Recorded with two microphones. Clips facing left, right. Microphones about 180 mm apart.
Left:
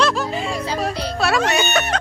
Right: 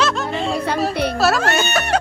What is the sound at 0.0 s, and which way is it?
Music, centre (ahead or behind).